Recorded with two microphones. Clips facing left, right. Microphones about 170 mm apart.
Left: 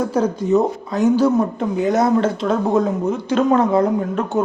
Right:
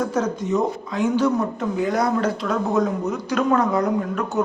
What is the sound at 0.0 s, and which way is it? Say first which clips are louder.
Speech: left 4 dB; 30° left (ahead or behind).